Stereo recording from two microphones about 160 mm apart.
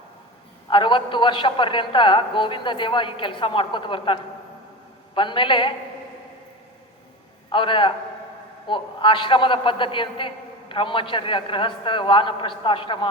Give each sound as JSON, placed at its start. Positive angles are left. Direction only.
{"t": 0.7, "sound": "a man's voice", "side_deg": 30}
{"t": 7.5, "sound": "a man's voice", "side_deg": 30}